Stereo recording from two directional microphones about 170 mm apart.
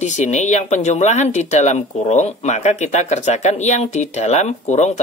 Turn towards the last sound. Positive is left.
turn(degrees=40)  # may be behind; listen again after turning